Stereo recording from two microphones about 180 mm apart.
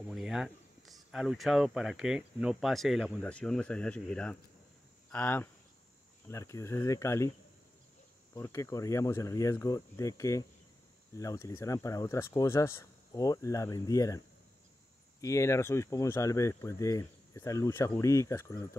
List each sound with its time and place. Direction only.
0.1 s speech: 5° right (ahead or behind); by 7.2 s 15° left (ahead or behind)
8.4 s speech: 15° left (ahead or behind)